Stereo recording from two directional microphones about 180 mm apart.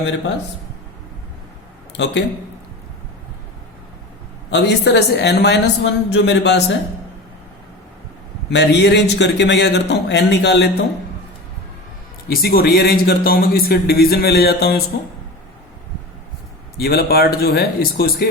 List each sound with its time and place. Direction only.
2.0 s a man's voice: 70° left (ahead or behind)
4.5 s a man's voice: 65° left (ahead or behind)
8.4 s a man's voice: 70° left (ahead or behind)
12.3 s speech: 60° left (ahead or behind)
16.7 s speech: 60° left (ahead or behind)